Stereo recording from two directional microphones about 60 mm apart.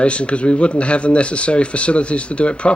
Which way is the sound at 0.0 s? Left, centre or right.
Centre.